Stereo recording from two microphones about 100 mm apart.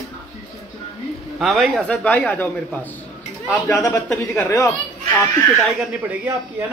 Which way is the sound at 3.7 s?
30° left (ahead or behind).